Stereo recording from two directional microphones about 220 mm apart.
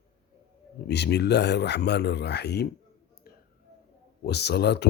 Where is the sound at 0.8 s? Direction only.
50° left (ahead or behind).